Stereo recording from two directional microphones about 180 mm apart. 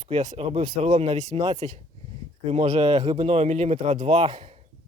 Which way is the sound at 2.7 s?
25° right (ahead or behind).